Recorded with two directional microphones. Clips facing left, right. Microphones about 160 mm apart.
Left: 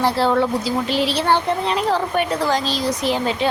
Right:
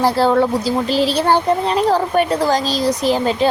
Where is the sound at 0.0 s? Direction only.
40° right (ahead or behind).